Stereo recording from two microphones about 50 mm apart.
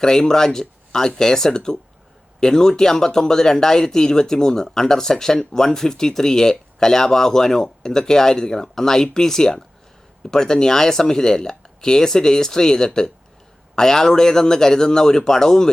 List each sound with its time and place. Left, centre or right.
0.0 s speech: centre